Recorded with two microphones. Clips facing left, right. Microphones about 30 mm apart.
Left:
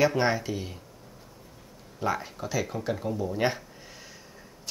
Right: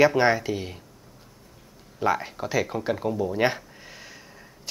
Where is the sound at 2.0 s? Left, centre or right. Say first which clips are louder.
Right 5 dB; centre.